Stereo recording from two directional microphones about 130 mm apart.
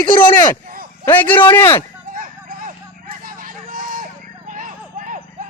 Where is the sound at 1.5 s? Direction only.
20° left (ahead or behind).